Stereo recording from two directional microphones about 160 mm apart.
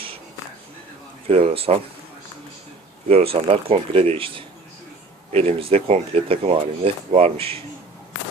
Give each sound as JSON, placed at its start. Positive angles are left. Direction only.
{"t": 1.3, "sound": "speech", "side_deg": -40}
{"t": 3.1, "sound": "speech", "side_deg": -40}